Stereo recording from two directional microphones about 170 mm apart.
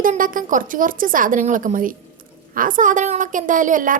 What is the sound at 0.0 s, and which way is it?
Speech, 55° right (ahead or behind).